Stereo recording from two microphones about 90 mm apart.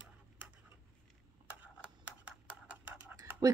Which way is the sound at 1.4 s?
20° right (ahead or behind).